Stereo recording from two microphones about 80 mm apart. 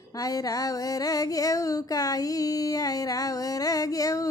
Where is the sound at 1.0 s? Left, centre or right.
Left.